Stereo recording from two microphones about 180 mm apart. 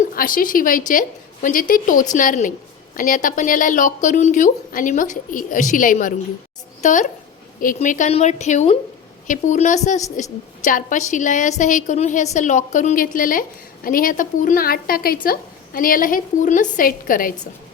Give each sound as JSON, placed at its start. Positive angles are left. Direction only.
{"t": 0.1, "sound": "a woman's voice", "side_deg": 50}